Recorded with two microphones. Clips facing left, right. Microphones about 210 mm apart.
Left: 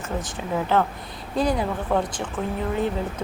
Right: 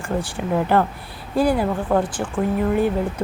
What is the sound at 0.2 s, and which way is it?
A woman's voice, 10° right (ahead or behind).